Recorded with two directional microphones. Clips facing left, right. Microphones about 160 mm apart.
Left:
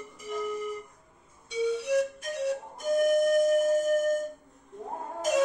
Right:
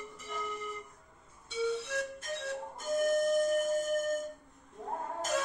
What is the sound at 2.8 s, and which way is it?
Music, 15° left (ahead or behind).